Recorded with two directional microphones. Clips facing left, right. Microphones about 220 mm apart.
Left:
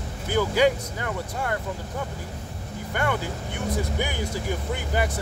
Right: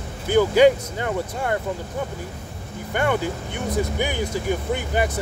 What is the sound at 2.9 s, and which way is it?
Speech, 20° right (ahead or behind).